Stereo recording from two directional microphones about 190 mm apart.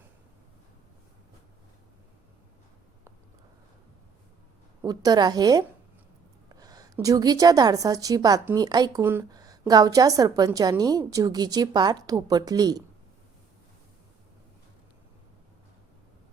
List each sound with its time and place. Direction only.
4.8 s a woman's voice: 20° right (ahead or behind)